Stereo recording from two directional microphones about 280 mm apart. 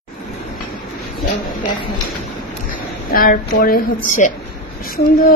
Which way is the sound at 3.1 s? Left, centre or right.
Left.